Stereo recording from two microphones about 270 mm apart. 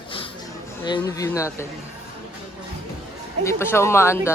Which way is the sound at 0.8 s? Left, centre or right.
Centre.